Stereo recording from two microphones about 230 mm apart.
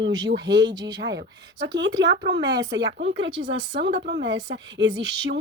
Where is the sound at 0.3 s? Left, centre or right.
Right.